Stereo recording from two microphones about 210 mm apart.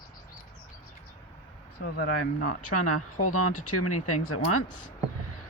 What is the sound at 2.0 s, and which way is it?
Speech, 90° left.